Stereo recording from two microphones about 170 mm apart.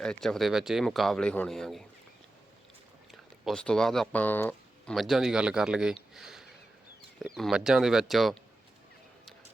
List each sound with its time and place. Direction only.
0.0 s speech: 5° left (ahead or behind)
3.1 s speech: centre (ahead or behind)
4.9 s speech: centre (ahead or behind)